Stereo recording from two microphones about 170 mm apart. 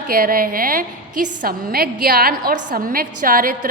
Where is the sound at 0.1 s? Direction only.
60° right (ahead or behind).